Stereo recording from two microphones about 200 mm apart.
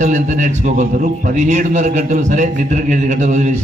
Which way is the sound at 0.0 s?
35° right (ahead or behind).